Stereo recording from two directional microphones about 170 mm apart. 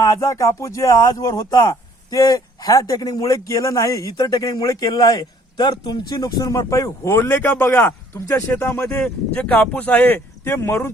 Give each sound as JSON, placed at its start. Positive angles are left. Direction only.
{"t": 0.0, "sound": "speech", "side_deg": 20}